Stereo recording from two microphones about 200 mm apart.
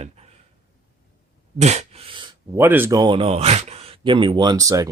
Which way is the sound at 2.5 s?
10° right (ahead or behind).